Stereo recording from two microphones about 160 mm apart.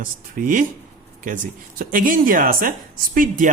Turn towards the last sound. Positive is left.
turn(degrees=-60)  # may be behind; listen again after turning